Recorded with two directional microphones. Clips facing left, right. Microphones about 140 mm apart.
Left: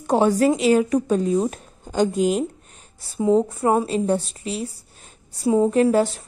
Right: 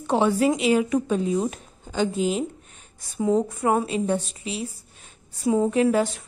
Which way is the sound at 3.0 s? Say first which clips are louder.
Left 4 dB; 30° left (ahead or behind).